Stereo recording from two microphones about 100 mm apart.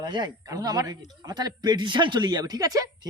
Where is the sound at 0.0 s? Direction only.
45° right (ahead or behind).